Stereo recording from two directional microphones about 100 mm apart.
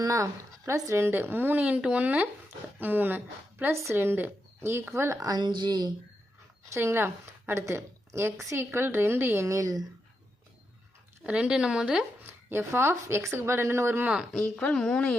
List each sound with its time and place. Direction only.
0.0 s a woman's voice: 35° right (ahead or behind)
6.7 s a woman's voice: 25° right (ahead or behind)
11.2 s speech: 10° right (ahead or behind)
12.2 s a woman's voice: 20° right (ahead or behind)
14.7 s a woman's voice: 10° left (ahead or behind)